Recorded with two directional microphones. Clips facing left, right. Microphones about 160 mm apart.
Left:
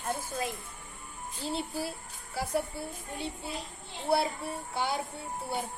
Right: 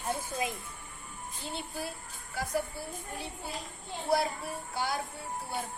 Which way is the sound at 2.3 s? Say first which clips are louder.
Left 1 dB; 30° left (ahead or behind).